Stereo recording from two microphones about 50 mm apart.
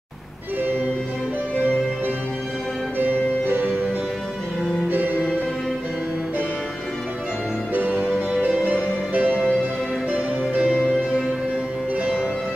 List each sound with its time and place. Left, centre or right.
3.0 s music: right
4.8 s music: right
7.7 s music: right